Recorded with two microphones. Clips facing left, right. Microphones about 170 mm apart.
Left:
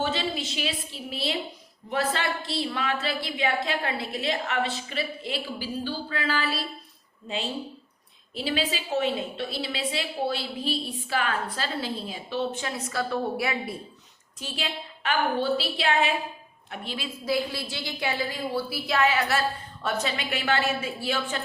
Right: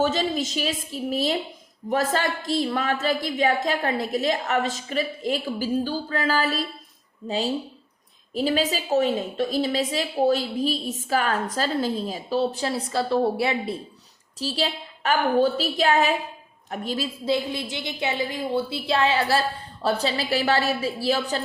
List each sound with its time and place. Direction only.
0.0 s a woman's voice: 40° right (ahead or behind)
17.2 s a woman's voice: 20° right (ahead or behind); by 21.4 s 35° right (ahead or behind)